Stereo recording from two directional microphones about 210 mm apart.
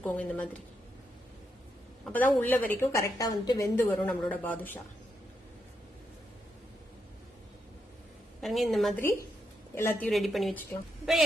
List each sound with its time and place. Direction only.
0.0 s a woman's voice: 5° left (ahead or behind)
2.0 s a woman's voice: 10° left (ahead or behind)
8.4 s a woman's voice: centre (ahead or behind)
9.7 s a woman's voice: 10° left (ahead or behind)
10.1 s a woman's voice: centre (ahead or behind)